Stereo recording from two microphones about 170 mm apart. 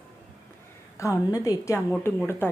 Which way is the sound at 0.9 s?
20° left (ahead or behind).